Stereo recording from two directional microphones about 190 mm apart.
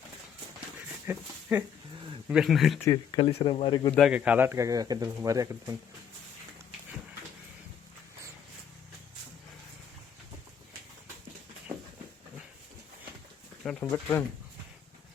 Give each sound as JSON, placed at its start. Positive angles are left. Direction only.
{"t": 1.0, "sound": "speech", "side_deg": -10}
{"t": 2.7, "sound": "speech", "side_deg": 15}
{"t": 3.2, "sound": "speech", "side_deg": 30}
{"t": 3.9, "sound": "speech", "side_deg": -5}
{"t": 13.9, "sound": "speech", "side_deg": 10}